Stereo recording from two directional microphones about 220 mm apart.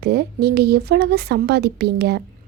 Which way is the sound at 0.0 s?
45° right (ahead or behind).